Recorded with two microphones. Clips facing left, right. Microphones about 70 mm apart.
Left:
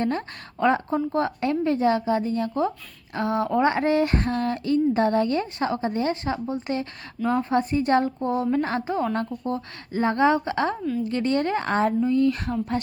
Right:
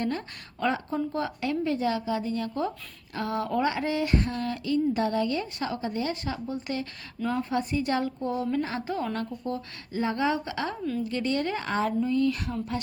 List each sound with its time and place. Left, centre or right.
0.0 s a woman's voice: left